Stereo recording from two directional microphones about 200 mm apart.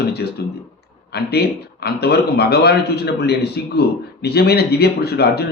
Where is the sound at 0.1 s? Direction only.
55° left (ahead or behind).